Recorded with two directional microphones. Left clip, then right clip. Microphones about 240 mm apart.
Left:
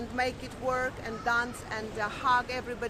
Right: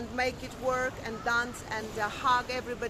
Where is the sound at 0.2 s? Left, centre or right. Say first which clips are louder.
Even; centre.